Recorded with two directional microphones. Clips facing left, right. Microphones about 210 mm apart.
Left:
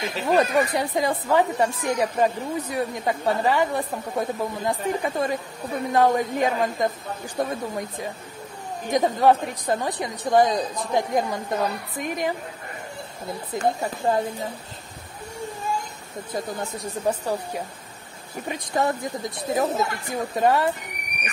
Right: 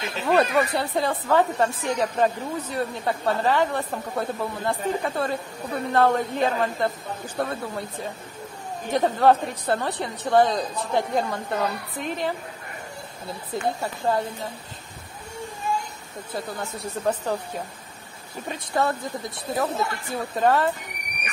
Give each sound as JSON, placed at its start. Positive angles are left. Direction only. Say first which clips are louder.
{"t": 0.0, "sound": "speech", "louder": "even", "side_deg": 15}
{"t": 13.7, "sound": "speech", "louder": "left 2 dB", "side_deg": 20}
{"t": 17.0, "sound": "speech", "louder": "even", "side_deg": 10}
{"t": 18.5, "sound": "speech", "louder": "left 1 dB", "side_deg": 15}